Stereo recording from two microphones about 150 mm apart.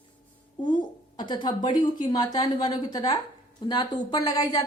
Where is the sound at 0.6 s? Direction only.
30° left (ahead or behind).